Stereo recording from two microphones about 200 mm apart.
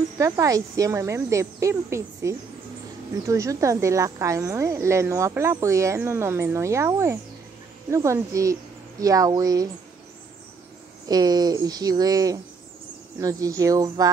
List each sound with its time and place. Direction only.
0.2 s speech: 15° right (ahead or behind)
11.1 s speech: 20° right (ahead or behind)